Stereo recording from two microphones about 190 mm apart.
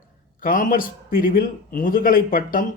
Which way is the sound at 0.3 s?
45° left (ahead or behind).